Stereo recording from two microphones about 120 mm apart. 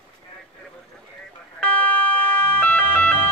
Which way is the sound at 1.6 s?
10° left (ahead or behind).